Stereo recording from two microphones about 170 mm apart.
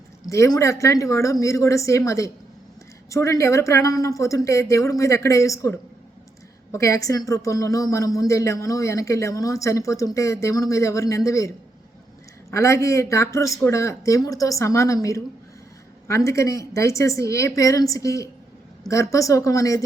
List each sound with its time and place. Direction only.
0.3 s a woman's voice: 20° left (ahead or behind)